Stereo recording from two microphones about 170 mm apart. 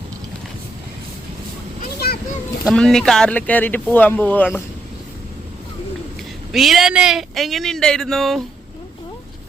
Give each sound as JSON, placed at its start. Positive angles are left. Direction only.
{"t": 2.0, "sound": "children playing", "side_deg": 65}
{"t": 2.6, "sound": "speech", "side_deg": 5}
{"t": 6.5, "sound": "speech", "side_deg": 0}